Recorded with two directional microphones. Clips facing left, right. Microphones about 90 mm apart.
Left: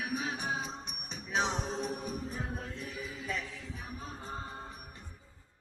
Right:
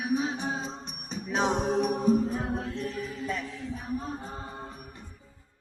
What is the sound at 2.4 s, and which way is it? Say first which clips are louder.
Music: right 8 dB; 90° right.